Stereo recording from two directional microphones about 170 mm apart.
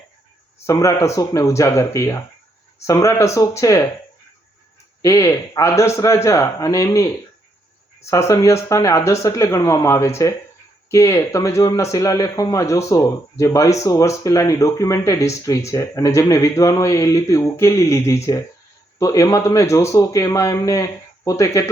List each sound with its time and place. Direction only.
0.6 s a man's voice: 20° left (ahead or behind)
5.0 s speech: 20° left (ahead or behind)
8.1 s a man's voice: 15° left (ahead or behind)